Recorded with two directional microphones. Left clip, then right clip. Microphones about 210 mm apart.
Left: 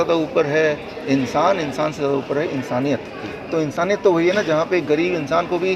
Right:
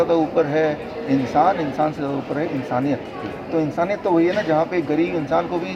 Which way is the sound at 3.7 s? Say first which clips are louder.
Left 3 dB; 45° left (ahead or behind).